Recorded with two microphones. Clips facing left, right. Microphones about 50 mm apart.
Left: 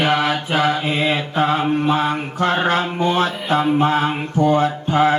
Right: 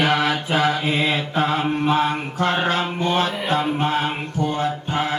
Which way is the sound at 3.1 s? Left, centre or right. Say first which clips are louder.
Even; left.